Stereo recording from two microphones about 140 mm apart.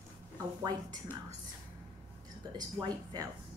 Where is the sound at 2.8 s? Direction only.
30° right (ahead or behind).